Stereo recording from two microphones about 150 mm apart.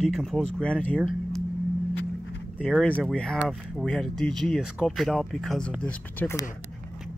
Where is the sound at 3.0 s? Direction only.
5° left (ahead or behind).